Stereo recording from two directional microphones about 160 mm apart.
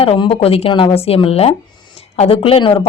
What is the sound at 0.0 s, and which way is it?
A woman's voice, 35° left (ahead or behind).